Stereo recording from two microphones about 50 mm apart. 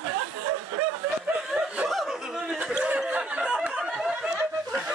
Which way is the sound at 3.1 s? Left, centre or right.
Centre.